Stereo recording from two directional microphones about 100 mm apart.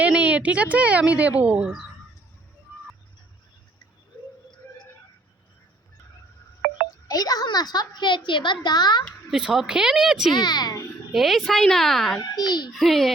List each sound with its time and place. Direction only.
0.0 s speech: 15° right (ahead or behind)
7.1 s a woman's voice: 40° left (ahead or behind)
9.3 s speech: 5° right (ahead or behind)
10.3 s a woman's voice: 45° left (ahead or behind)
11.1 s speech: centre (ahead or behind)
12.2 s a woman's voice: 45° left (ahead or behind)
12.7 s speech: centre (ahead or behind)